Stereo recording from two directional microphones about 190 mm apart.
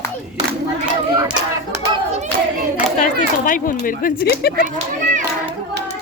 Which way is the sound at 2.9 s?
45° left (ahead or behind).